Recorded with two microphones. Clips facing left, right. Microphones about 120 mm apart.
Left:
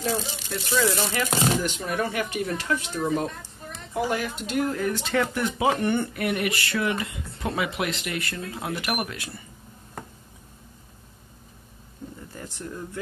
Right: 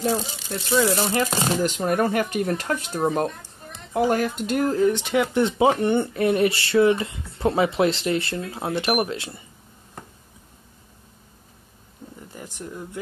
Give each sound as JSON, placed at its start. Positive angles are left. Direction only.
{"t": 0.0, "sound": "speech", "side_deg": -25}
{"t": 4.7, "sound": "speech", "side_deg": -20}
{"t": 12.3, "sound": "a sound", "side_deg": -15}